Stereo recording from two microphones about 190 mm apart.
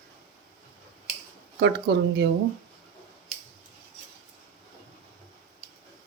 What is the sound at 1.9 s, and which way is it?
Speech, 65° right (ahead or behind).